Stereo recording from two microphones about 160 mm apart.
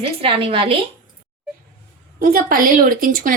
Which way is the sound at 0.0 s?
35° right (ahead or behind).